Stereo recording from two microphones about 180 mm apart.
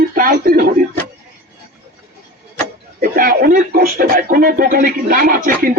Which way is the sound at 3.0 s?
55° right (ahead or behind).